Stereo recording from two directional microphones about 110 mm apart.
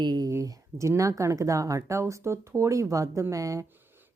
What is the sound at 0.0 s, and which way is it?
A woman's voice, 40° right (ahead or behind).